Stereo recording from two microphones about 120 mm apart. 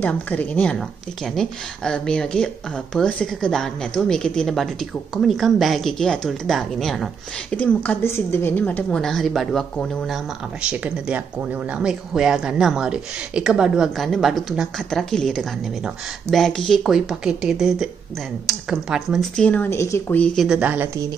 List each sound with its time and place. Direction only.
0.0 s speech: 10° left (ahead or behind)
7.5 s a woman's voice: 15° left (ahead or behind)
19.4 s a woman's voice: 10° left (ahead or behind)
19.7 s speech: 20° left (ahead or behind)
20.3 s speech: 5° right (ahead or behind)